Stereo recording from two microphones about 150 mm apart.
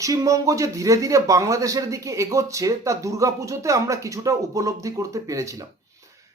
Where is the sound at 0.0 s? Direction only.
20° right (ahead or behind).